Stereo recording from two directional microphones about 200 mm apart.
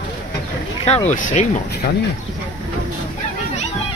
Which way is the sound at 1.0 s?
40° left (ahead or behind).